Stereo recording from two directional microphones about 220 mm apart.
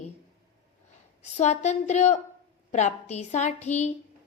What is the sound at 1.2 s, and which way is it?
A woman's voice, 30° left (ahead or behind).